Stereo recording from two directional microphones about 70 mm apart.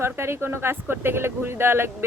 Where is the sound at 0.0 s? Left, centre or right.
Right.